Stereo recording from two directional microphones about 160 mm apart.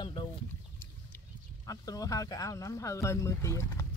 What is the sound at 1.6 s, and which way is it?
Speech, 20° left (ahead or behind).